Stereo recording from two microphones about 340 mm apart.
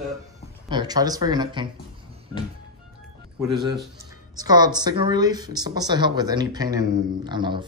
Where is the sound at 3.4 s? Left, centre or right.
Centre.